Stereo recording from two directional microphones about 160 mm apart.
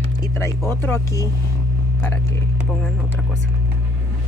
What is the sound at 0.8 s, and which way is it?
Speech, 15° left (ahead or behind).